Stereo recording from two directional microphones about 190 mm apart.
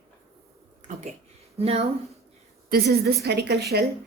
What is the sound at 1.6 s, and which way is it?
Speech, 30° right (ahead or behind).